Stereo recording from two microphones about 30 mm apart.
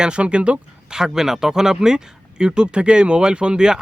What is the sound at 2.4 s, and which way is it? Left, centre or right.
Speech, right.